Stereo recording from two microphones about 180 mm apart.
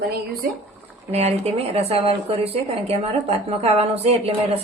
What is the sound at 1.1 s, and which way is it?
Speech, 35° right (ahead or behind).